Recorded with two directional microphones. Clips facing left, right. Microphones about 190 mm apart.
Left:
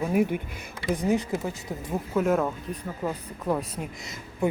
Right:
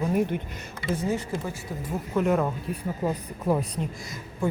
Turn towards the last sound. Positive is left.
turn(degrees=20)  # may be behind; listen again after turning